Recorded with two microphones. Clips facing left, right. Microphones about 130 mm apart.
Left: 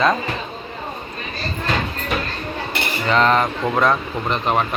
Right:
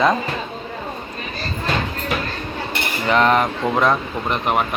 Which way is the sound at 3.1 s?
10° right (ahead or behind).